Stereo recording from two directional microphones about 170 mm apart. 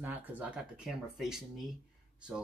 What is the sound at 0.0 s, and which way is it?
Speech, 10° right (ahead or behind).